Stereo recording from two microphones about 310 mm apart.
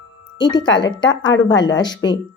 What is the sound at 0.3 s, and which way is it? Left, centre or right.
Speech, centre.